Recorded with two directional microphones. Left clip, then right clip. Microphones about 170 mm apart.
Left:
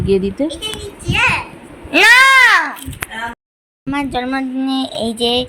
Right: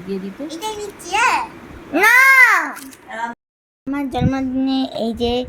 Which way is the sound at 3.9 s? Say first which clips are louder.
Left 3 dB; 5° right (ahead or behind).